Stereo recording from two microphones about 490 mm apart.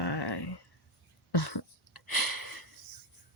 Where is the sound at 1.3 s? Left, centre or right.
Left.